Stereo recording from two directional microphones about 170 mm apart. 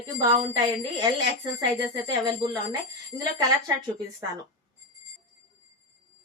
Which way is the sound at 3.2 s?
20° right (ahead or behind).